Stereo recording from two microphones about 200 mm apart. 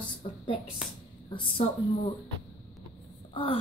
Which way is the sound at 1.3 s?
25° left (ahead or behind).